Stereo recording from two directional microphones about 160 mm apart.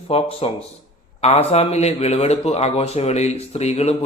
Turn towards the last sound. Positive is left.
turn(degrees=40)  # may be behind; listen again after turning